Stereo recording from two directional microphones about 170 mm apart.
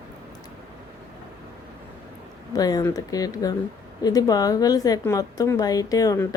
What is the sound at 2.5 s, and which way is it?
Speech, 20° left (ahead or behind).